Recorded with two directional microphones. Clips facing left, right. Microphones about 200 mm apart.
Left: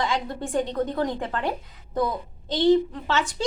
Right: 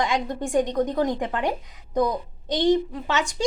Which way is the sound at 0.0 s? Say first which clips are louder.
Right 2 dB; 15° right (ahead or behind).